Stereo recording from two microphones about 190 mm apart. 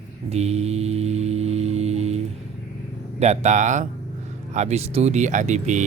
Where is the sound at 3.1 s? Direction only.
35° right (ahead or behind).